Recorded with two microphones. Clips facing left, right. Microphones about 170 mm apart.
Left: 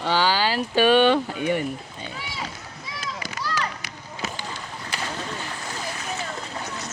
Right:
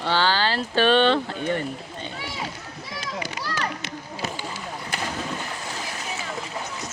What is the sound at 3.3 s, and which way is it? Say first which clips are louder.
Children playing: even; 30° right (ahead or behind).